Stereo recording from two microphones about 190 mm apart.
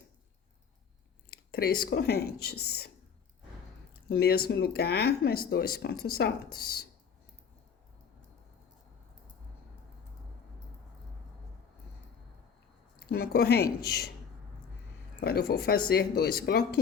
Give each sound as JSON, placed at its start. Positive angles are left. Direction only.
{"t": 1.5, "sound": "speech", "side_deg": 50}
{"t": 4.1, "sound": "speech", "side_deg": 55}
{"t": 13.1, "sound": "speech", "side_deg": 55}
{"t": 15.2, "sound": "speech", "side_deg": 55}